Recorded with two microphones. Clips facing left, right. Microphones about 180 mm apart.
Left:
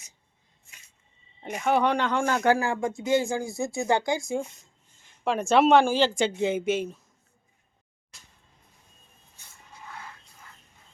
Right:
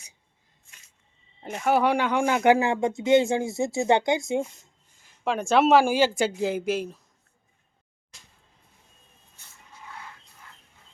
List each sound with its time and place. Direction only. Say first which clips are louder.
1.4 s speech: right 1 dB; 5° right (ahead or behind); by 4.4 s 20° right (ahead or behind)
5.2 s speech: even; centre (ahead or behind)